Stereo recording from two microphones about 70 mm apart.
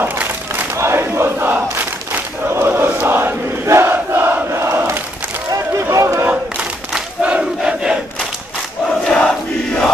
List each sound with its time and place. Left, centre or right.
0.0 s crowd: right
2.5 s chant: right
3.6 s crowd: right
5.8 s run: right
7.2 s crowd: centre
9.0 s crowd: centre